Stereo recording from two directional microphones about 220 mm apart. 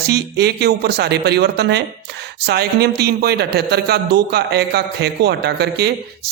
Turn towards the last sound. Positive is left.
turn(degrees=-50)  # may be behind; listen again after turning